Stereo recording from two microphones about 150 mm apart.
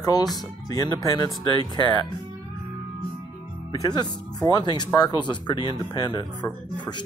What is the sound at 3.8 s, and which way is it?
Speech, 25° left (ahead or behind).